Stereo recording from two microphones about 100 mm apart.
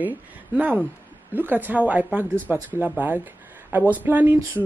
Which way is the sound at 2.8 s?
20° right (ahead or behind).